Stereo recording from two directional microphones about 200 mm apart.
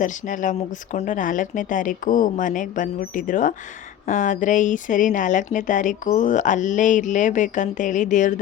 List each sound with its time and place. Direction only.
0.0 s speech: 40° left (ahead or behind)